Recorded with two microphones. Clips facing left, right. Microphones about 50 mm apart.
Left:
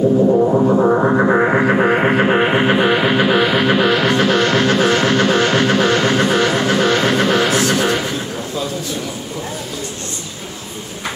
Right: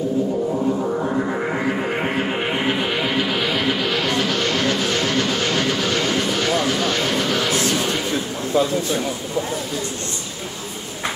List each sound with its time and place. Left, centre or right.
0.3 s music: left